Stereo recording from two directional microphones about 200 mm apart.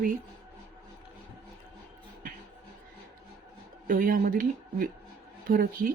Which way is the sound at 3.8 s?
45° right (ahead or behind).